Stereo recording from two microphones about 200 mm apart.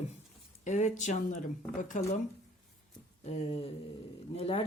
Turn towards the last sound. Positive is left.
turn(degrees=30)  # may be behind; listen again after turning